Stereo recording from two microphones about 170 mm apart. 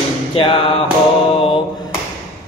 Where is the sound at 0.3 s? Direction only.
30° left (ahead or behind).